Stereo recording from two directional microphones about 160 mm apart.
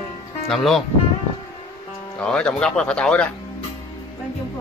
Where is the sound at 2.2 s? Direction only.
5° left (ahead or behind).